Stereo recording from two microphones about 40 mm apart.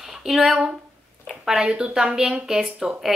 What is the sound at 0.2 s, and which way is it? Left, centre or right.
Speech, centre.